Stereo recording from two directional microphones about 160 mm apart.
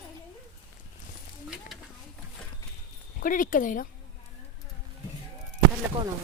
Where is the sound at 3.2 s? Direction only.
55° left (ahead or behind).